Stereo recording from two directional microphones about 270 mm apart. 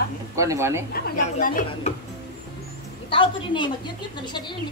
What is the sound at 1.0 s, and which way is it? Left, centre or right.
Speech, left.